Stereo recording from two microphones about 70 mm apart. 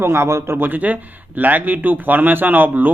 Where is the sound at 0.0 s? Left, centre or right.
Right.